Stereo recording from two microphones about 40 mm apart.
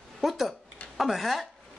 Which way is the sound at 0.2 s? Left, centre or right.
Centre.